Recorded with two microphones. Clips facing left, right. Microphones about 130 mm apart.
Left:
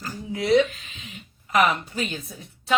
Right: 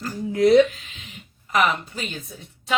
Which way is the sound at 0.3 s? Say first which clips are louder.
Right 5 dB; 45° right (ahead or behind).